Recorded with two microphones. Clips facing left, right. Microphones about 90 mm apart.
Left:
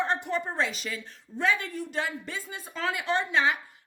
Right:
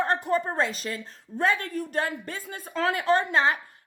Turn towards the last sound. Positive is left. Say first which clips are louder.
# right 3 dB
turn(degrees=-40)  # may be behind; listen again after turning